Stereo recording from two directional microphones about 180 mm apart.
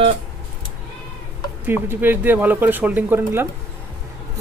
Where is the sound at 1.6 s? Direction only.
10° right (ahead or behind).